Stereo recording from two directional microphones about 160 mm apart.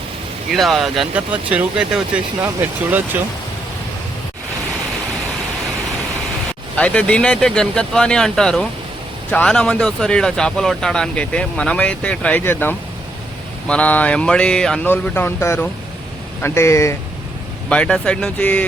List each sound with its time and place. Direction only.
0.5 s speech: centre (ahead or behind)
6.7 s speech: 10° left (ahead or behind)
17.7 s speech: 5° left (ahead or behind)